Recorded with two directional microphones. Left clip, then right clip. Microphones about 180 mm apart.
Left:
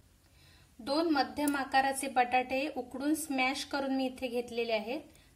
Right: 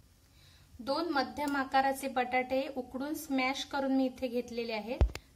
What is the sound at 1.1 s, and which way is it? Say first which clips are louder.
A woman's voice: left 1 dB; 50° left (ahead or behind).